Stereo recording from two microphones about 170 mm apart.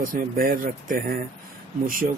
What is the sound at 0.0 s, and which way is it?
Speech, 55° right (ahead or behind).